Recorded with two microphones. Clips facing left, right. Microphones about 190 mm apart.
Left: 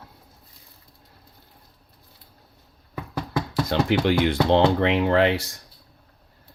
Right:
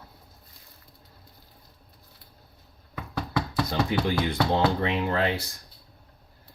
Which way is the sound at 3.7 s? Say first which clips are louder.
Left 6 dB; 80° left.